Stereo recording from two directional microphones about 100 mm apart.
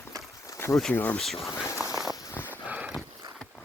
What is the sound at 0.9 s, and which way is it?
Speech, 20° left (ahead or behind).